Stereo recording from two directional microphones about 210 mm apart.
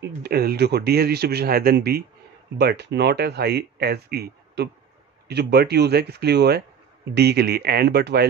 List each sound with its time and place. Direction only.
0.0 s speech: 50° right (ahead or behind)